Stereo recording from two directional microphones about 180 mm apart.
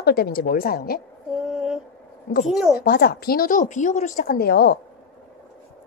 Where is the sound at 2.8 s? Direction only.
60° left (ahead or behind).